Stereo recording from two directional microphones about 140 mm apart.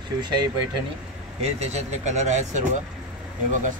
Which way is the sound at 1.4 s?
50° right (ahead or behind).